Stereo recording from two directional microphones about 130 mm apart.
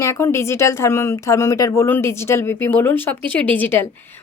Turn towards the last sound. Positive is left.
turn(degrees=15)  # may be behind; listen again after turning